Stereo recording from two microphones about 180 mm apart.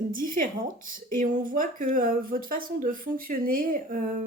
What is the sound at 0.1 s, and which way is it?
Speech, 50° right (ahead or behind).